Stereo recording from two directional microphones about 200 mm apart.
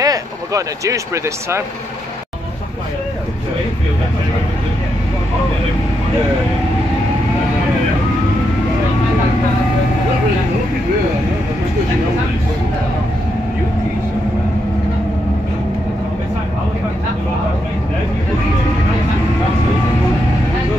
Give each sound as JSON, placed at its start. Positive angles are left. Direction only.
{"t": 0.0, "sound": "speech", "side_deg": -15}